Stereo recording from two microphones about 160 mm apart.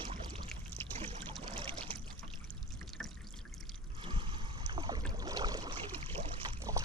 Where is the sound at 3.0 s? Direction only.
Centre (ahead or behind).